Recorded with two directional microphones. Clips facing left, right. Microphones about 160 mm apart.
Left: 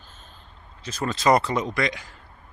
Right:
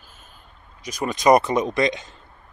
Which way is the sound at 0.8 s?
15° right (ahead or behind).